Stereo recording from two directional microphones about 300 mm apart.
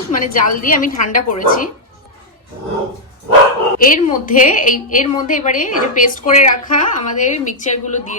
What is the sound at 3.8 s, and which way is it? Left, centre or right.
A woman's voice, left.